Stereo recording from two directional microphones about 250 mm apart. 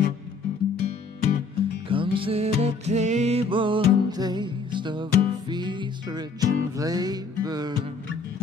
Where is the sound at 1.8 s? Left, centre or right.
Right.